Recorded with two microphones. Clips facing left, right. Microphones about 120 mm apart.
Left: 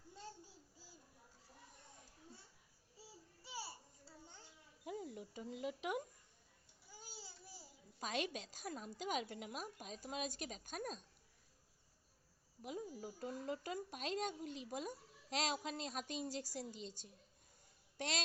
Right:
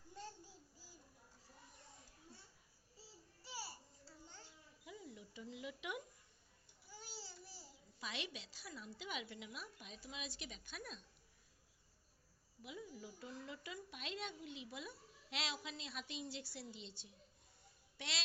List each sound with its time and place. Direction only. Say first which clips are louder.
3.4 s babbling: left 1 dB; 20° left (ahead or behind)
4.9 s speech: left 8 dB; 50° left (ahead or behind)
6.9 s babbling: right 2 dB; 15° left (ahead or behind)
7.9 s speech: left 7 dB; 45° left (ahead or behind)
12.6 s speech: left 5 dB; 40° left (ahead or behind)